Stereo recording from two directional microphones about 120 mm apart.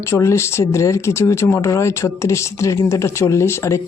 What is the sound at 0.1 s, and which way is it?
Speech, 25° left (ahead or behind).